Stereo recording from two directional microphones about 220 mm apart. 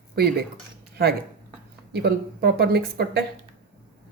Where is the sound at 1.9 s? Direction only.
50° right (ahead or behind).